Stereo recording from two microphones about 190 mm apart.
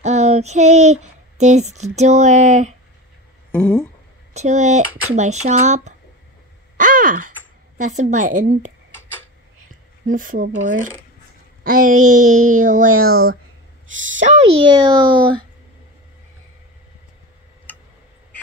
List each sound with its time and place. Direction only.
0.0 s speech: 35° right (ahead or behind)
3.5 s a sound: 10° left (ahead or behind)
4.3 s speech: 35° right (ahead or behind)
8.9 s tick-tock: 10° left (ahead or behind)
9.7 s a child's voice: 45° right (ahead or behind)
13.1 s speech: 90° right
14.2 s a child's voice: 35° right (ahead or behind)